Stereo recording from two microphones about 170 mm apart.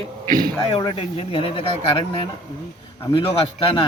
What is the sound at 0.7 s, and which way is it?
A man's voice, 35° left (ahead or behind).